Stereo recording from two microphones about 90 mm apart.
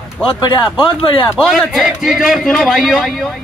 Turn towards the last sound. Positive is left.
turn(degrees=-5)  # may be behind; listen again after turning